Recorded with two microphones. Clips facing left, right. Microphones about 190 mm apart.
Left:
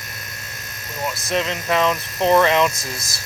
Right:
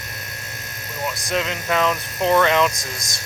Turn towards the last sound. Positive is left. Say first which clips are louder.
# left 1 dB
turn(degrees=5)  # may be behind; listen again after turning